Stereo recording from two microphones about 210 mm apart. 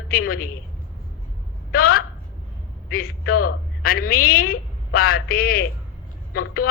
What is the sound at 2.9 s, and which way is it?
Speech, 45° left (ahead or behind).